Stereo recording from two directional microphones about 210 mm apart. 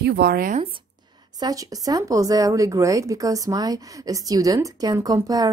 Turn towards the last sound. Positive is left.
turn(degrees=-15)  # may be behind; listen again after turning